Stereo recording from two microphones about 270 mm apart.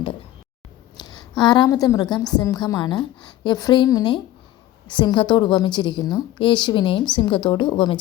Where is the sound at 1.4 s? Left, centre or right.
Centre.